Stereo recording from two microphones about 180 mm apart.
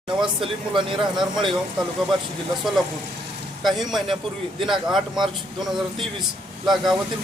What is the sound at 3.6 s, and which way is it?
A man's voice, centre (ahead or behind).